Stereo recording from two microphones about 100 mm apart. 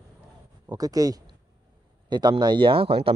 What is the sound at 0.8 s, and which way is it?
Speech, 35° right (ahead or behind).